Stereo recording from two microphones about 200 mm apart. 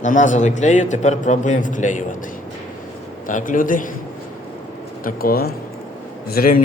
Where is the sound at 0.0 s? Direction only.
40° left (ahead or behind).